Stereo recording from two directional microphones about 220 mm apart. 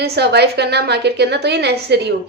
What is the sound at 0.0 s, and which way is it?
A woman's voice, 50° right (ahead or behind).